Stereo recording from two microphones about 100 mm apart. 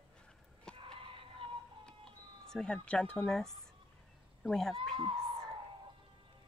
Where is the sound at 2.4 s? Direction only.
5° left (ahead or behind).